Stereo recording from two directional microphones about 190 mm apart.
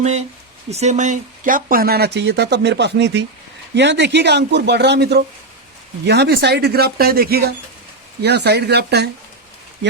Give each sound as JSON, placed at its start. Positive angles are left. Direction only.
{"t": 0.0, "sound": "speech", "side_deg": -35}